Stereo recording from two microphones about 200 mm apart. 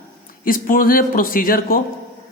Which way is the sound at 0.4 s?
45° left (ahead or behind).